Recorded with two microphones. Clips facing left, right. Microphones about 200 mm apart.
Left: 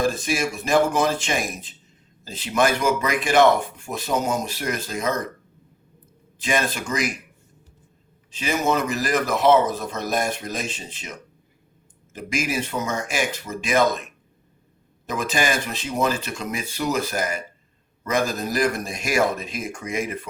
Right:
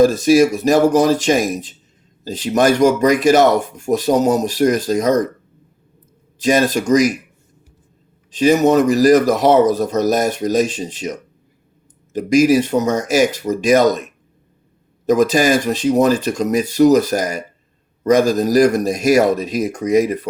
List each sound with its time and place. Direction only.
0.0 s speech: 40° right (ahead or behind)
6.4 s speech: 40° right (ahead or behind)
8.3 s speech: 40° right (ahead or behind)